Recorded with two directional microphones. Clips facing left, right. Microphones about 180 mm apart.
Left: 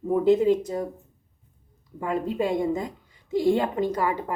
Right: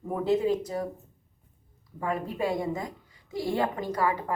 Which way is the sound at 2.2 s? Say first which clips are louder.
Left 7 dB; 20° left (ahead or behind).